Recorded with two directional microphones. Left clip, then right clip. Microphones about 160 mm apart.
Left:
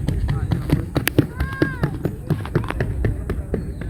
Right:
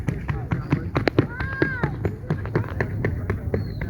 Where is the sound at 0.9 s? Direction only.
90° left.